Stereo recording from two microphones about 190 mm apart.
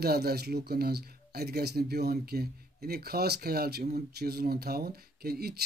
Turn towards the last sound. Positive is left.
turn(degrees=-55)  # may be behind; listen again after turning